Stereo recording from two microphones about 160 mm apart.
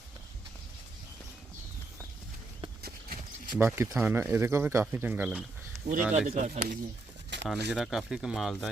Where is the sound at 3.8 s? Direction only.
15° right (ahead or behind).